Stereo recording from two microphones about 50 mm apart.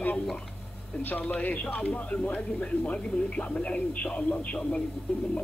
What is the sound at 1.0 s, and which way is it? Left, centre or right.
A man's voice, left.